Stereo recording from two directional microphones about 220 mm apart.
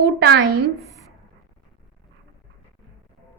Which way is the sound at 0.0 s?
45° right (ahead or behind).